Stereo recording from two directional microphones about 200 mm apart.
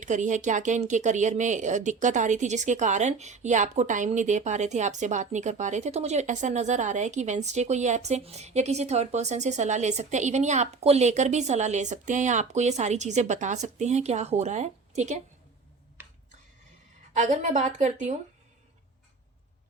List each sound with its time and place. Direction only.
0.0 s speech: 40° right (ahead or behind)
16.0 s a sound: 10° right (ahead or behind)
17.2 s speech: 40° right (ahead or behind)